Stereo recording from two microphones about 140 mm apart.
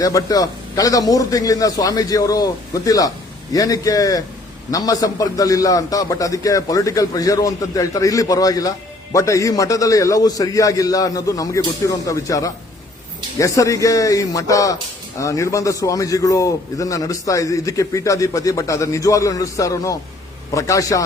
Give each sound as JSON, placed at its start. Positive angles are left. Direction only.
{"t": 0.0, "sound": "a man's voice", "side_deg": 25}